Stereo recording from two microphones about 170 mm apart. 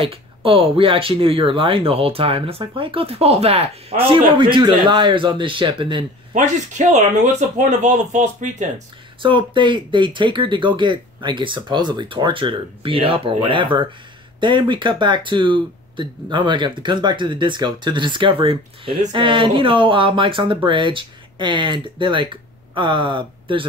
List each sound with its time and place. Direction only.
0.0 s speech: 30° right (ahead or behind)
6.3 s speech: 45° right (ahead or behind)
9.2 s speech: 30° right (ahead or behind)